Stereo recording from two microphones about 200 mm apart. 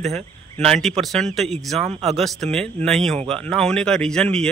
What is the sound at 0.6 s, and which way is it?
A man's voice, 5° left (ahead or behind).